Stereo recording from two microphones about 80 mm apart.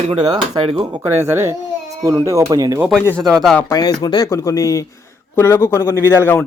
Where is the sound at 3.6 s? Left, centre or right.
Left.